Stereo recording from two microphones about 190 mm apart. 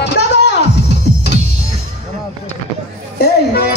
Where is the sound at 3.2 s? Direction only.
60° left (ahead or behind).